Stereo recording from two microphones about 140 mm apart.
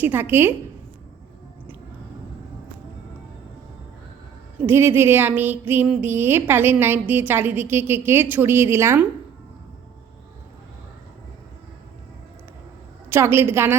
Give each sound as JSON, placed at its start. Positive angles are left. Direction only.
{"t": 0.0, "sound": "speech", "side_deg": -15}
{"t": 4.6, "sound": "speech", "side_deg": -15}
{"t": 13.1, "sound": "speech", "side_deg": -15}